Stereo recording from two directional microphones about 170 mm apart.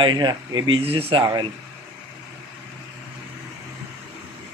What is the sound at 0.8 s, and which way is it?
Speech, 35° right (ahead or behind).